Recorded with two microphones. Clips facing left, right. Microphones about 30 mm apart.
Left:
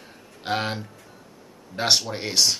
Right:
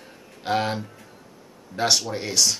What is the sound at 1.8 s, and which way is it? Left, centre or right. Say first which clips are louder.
Speech: even; centre.